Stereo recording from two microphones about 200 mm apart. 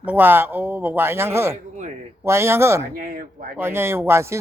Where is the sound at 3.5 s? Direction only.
10° right (ahead or behind).